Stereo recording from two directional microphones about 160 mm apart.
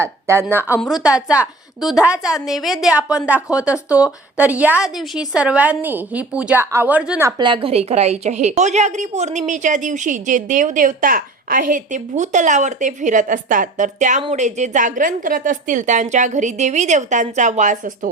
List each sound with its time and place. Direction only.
0.0 s a woman's voice: 15° right (ahead or behind)
7.3 s a woman's voice: 30° right (ahead or behind); by 18.1 s 55° right (ahead or behind)